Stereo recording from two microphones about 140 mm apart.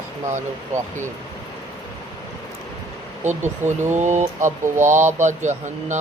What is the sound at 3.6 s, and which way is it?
Speech, 20° right (ahead or behind).